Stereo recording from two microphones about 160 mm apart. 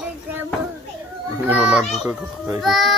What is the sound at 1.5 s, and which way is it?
A child's voice, 5° right (ahead or behind).